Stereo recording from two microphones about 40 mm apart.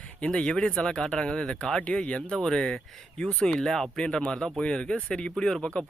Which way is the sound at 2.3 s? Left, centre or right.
Centre.